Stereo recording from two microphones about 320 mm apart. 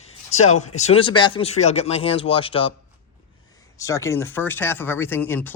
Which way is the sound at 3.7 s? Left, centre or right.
Centre.